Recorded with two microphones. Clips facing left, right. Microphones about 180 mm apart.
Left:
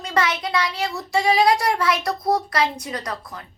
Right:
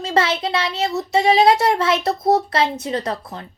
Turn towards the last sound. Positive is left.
turn(degrees=-25)  # may be behind; listen again after turning